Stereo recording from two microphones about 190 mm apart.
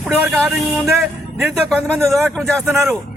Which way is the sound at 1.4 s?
5° left (ahead or behind).